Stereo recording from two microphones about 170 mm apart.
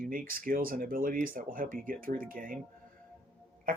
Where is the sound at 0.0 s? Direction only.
55° right (ahead or behind).